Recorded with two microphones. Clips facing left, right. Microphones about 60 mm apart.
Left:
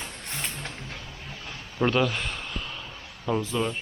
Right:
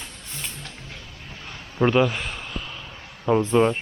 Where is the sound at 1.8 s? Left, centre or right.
Centre.